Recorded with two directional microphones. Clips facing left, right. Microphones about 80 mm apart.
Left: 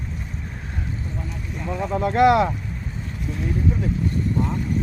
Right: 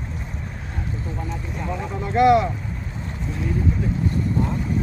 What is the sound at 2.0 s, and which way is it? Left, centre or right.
Speech, left.